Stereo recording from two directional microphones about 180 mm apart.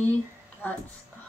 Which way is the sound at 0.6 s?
10° left (ahead or behind).